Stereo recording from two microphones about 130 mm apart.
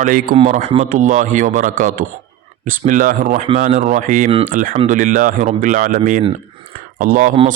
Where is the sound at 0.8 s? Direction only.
70° right (ahead or behind).